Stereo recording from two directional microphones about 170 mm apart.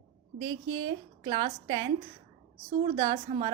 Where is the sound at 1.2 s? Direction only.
25° right (ahead or behind).